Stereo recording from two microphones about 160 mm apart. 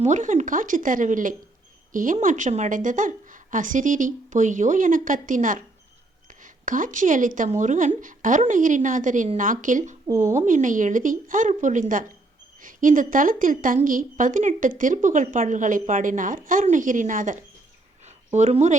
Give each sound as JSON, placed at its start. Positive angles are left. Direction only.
{"t": 0.0, "sound": "a woman's voice", "side_deg": -50}